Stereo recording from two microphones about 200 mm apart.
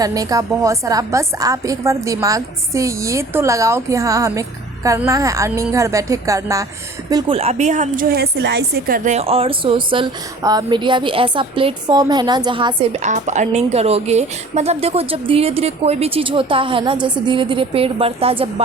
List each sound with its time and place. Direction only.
0.0 s a woman's voice: 20° right (ahead or behind); by 9.0 s 55° right (ahead or behind)
9.0 s a woman's voice: 30° right (ahead or behind)